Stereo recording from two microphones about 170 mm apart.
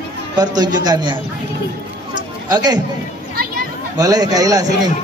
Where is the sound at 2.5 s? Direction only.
25° right (ahead or behind).